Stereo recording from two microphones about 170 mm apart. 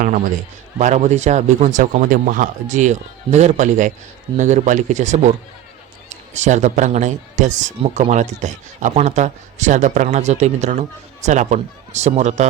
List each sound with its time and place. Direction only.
0.8 s a man's voice: 45° right (ahead or behind)